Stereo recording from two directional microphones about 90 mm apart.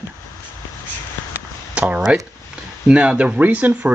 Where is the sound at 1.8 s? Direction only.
10° right (ahead or behind).